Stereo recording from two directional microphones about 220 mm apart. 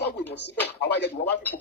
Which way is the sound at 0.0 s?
50° left (ahead or behind).